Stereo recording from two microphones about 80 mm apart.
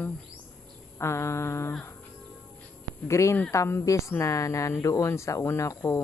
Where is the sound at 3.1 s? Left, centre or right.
Left.